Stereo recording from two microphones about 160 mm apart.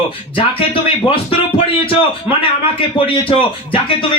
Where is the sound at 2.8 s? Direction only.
35° left (ahead or behind).